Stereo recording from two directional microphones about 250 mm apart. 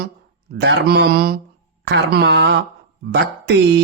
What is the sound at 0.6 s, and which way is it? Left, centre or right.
Speech, right.